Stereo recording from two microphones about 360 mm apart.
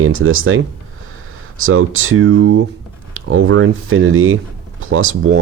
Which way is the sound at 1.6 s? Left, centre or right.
Right.